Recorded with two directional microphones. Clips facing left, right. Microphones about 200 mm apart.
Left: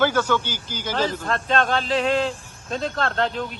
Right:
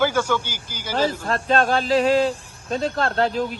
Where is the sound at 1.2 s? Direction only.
30° right (ahead or behind).